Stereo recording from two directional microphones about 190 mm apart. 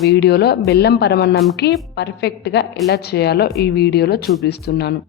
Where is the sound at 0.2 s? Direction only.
60° left (ahead or behind).